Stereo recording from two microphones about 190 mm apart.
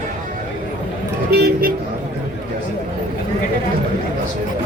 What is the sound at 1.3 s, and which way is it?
Vehicle, 50° right (ahead or behind).